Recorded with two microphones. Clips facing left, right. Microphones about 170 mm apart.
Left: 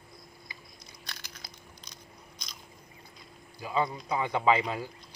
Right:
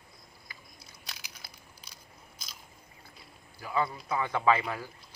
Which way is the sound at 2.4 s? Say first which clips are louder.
Even; 5° right (ahead or behind).